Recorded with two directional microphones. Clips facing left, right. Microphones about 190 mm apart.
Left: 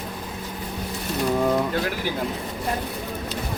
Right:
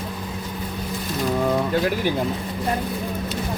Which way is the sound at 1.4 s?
Centre (ahead or behind).